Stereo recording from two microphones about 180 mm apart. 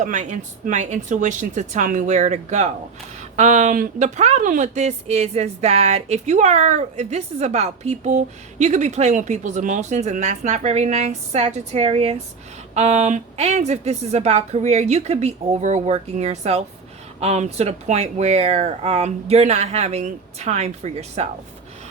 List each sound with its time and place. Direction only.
0.0 s speech: 45° right (ahead or behind)